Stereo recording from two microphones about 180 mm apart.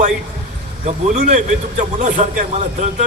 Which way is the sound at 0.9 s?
45° right (ahead or behind).